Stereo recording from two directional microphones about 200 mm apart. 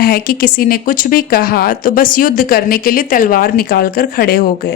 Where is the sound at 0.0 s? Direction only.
50° left (ahead or behind).